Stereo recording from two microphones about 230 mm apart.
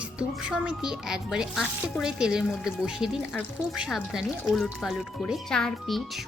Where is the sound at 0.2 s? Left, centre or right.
Centre.